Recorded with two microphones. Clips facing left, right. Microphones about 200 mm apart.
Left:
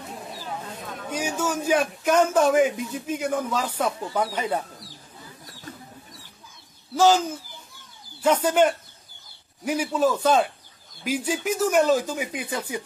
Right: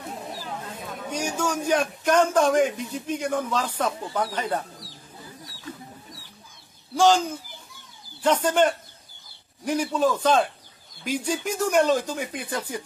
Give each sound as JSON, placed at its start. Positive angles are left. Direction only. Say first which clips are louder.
{"t": 1.1, "sound": "a man's voice", "louder": "even", "side_deg": 5}
{"t": 7.0, "sound": "a man's voice", "louder": "left 1 dB", "side_deg": 5}